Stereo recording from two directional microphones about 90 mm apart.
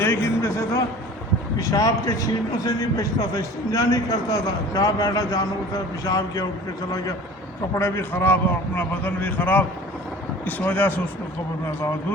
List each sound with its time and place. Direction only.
0.0 s a sound: 25° left (ahead or behind)
1.5 s a man's voice: 40° left (ahead or behind)
7.8 s a man's voice: 25° left (ahead or behind)